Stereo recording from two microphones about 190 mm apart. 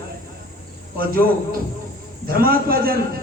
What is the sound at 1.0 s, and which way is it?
A man's voice, 50° right (ahead or behind).